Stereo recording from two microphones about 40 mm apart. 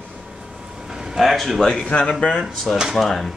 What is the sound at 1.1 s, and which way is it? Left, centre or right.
Speech, centre.